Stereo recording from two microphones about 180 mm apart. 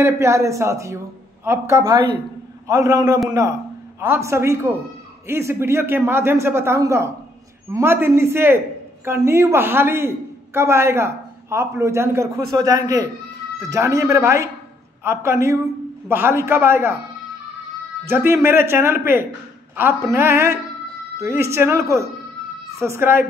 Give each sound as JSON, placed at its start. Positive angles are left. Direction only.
{"t": 0.0, "sound": "a man's voice", "side_deg": -15}
{"t": 18.0, "sound": "a man's voice", "side_deg": -15}